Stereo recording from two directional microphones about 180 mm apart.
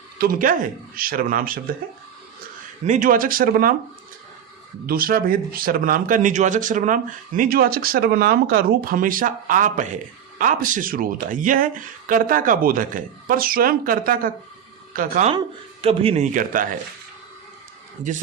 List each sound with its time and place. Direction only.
0.2 s speech: 50° right (ahead or behind)
2.8 s speech: 45° right (ahead or behind)
4.9 s speech: 55° right (ahead or behind)
15.3 s speech: 30° right (ahead or behind); by 16.6 s 45° right (ahead or behind)